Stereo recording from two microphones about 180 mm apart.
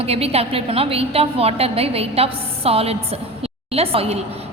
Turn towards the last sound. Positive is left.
turn(degrees=-35)  # may be behind; listen again after turning